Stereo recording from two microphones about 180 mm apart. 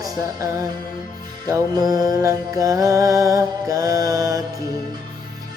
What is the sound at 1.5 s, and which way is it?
Mantra, 20° right (ahead or behind).